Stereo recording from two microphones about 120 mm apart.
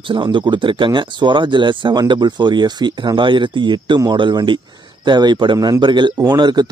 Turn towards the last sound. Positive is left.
turn(degrees=-35)  # may be behind; listen again after turning